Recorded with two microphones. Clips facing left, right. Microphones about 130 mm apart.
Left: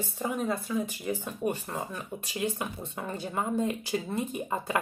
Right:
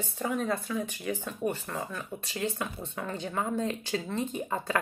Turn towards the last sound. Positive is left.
turn(degrees=10)  # may be behind; listen again after turning